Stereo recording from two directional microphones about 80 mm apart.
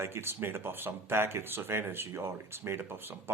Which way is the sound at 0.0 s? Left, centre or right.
Right.